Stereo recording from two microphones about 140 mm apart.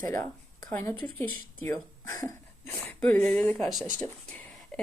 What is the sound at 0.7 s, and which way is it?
A woman's voice, 20° left (ahead or behind).